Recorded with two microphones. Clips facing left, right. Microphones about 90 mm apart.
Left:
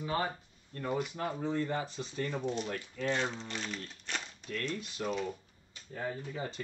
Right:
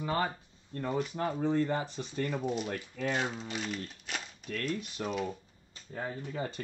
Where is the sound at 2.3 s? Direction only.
5° right (ahead or behind).